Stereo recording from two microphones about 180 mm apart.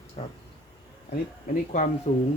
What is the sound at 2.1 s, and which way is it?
Speech, 40° left (ahead or behind).